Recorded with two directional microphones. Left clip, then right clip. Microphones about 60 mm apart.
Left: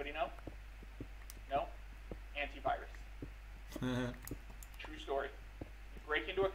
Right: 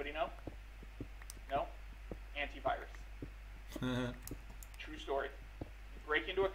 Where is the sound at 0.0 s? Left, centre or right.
Right.